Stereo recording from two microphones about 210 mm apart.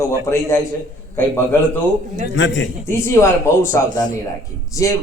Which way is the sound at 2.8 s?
15° left (ahead or behind).